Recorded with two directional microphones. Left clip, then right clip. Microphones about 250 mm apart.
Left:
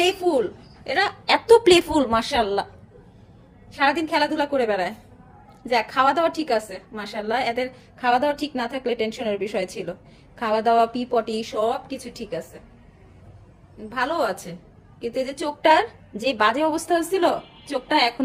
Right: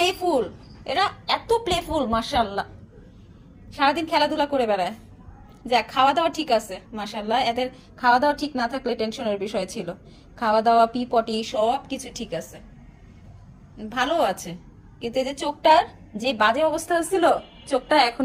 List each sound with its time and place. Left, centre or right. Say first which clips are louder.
0.0 s a woman's voice: left 1 dB; centre
1.5 s a woman's voice: left 11 dB; left
3.8 s a woman's voice: even; centre
11.9 s a woman's voice: even; centre
13.9 s a woman's voice: right 1 dB; centre
15.6 s a woman's voice: even; left